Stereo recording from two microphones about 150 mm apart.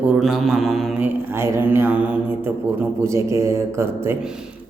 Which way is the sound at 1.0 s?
15° right (ahead or behind).